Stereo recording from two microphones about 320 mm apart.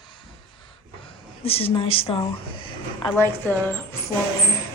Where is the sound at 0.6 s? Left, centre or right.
Centre.